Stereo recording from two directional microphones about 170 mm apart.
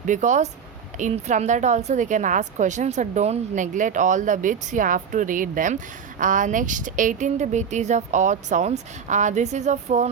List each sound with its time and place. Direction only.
0.0 s a woman's voice: 45° right (ahead or behind)